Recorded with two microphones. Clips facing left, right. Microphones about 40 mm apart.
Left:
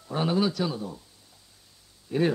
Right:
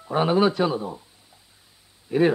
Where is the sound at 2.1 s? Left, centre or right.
Right.